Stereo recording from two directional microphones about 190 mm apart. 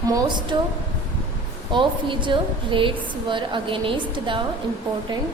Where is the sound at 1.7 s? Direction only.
25° right (ahead or behind).